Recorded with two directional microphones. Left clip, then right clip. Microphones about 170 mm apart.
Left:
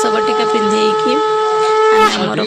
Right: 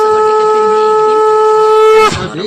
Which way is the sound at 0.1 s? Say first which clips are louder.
Right 5 dB; 40° right (ahead or behind).